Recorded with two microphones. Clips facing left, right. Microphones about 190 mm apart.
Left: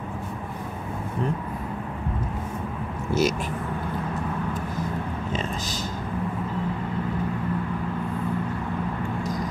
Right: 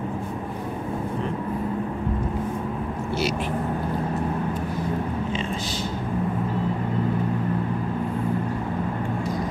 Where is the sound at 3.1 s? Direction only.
45° left (ahead or behind).